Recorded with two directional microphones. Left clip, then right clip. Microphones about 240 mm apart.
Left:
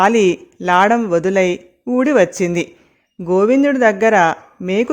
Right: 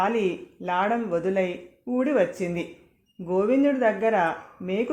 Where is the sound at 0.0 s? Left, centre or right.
Left.